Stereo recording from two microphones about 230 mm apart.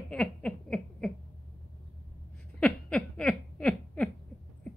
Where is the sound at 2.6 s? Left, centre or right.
Centre.